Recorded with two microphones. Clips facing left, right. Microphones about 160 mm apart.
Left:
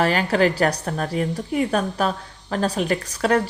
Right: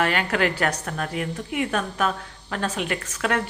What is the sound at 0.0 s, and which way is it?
A woman's voice, 35° left (ahead or behind).